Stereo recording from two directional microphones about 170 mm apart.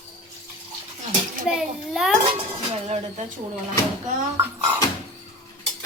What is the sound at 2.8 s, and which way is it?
Speech, 40° right (ahead or behind).